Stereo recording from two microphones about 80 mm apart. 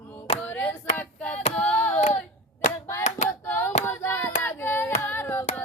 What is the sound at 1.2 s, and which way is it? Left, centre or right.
Hands, centre.